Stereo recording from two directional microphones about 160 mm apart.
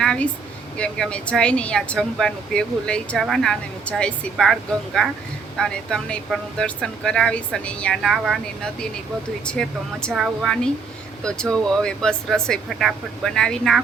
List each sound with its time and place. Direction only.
0.0 s a sound: 5° left (ahead or behind)
0.8 s speech: 5° left (ahead or behind)
9.5 s speech: 5° left (ahead or behind)